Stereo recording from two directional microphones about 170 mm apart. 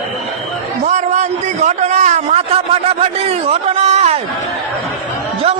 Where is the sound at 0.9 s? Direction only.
40° right (ahead or behind).